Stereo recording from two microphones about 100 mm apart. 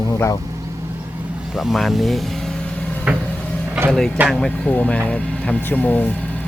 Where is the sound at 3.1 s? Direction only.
15° right (ahead or behind).